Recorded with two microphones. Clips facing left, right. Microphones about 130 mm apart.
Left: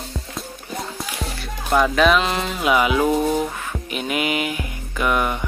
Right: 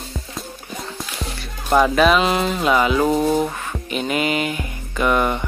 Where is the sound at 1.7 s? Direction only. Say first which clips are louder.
Right 2 dB; 5° right (ahead or behind).